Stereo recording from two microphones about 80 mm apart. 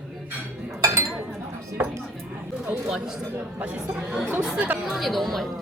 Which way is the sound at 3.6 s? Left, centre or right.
Centre.